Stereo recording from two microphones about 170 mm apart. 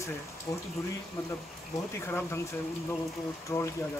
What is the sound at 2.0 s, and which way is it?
Speech, 15° left (ahead or behind).